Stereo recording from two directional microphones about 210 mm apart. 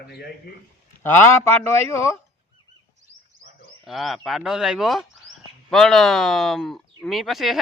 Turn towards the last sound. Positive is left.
turn(degrees=0)  # may be behind; listen again after turning